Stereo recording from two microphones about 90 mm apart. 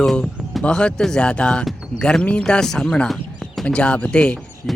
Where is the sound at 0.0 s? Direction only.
5° left (ahead or behind).